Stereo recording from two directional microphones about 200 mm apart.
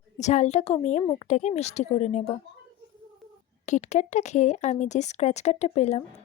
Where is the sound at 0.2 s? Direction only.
35° left (ahead or behind).